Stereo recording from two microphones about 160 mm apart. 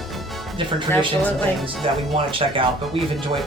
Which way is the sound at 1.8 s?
35° right (ahead or behind).